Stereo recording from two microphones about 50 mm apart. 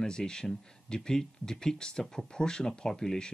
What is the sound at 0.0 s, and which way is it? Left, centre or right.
Speech, centre.